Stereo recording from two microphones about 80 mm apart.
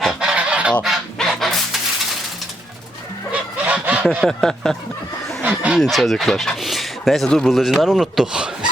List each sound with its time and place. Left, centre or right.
0.0 s goose: centre
0.8 s fowl: centre
3.7 s fowl: centre
4.3 s speech: centre
5.4 s chicken: centre
5.8 s speech: centre